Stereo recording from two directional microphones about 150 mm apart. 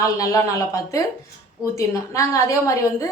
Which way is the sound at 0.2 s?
20° left (ahead or behind).